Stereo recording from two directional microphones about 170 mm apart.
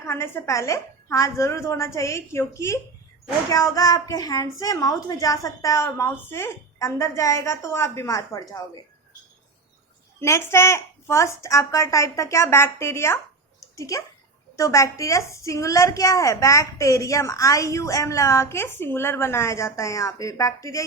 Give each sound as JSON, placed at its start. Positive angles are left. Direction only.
{"t": 0.0, "sound": "a woman's voice", "side_deg": 15}
{"t": 10.2, "sound": "a woman's voice", "side_deg": 15}